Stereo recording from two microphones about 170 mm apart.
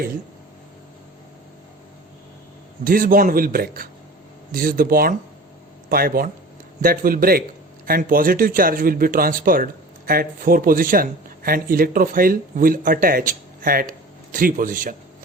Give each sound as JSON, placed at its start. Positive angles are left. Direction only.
{"t": 2.8, "sound": "a man's voice", "side_deg": -55}